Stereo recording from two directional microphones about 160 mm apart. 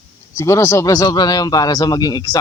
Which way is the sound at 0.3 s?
20° left (ahead or behind).